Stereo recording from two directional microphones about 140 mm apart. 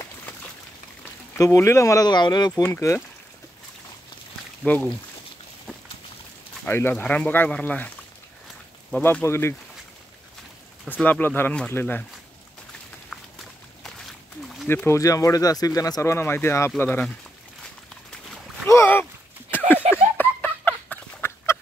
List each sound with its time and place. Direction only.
1.3 s speech: 20° left (ahead or behind)
2.7 s speech: 20° left (ahead or behind)
4.6 s speech: 10° left (ahead or behind)
6.6 s speech: 15° left (ahead or behind)
9.0 s speech: 15° left (ahead or behind)
10.9 s speech: 10° left (ahead or behind)
14.7 s speech: 20° left (ahead or behind)
18.7 s boat: 15° left (ahead or behind)
20.2 s fowl: 10° left (ahead or behind)